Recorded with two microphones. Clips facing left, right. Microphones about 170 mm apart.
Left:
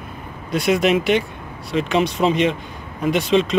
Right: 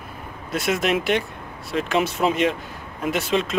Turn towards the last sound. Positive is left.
turn(degrees=0)  # may be behind; listen again after turning